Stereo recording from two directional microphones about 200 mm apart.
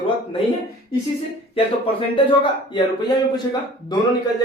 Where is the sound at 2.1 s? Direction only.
25° left (ahead or behind).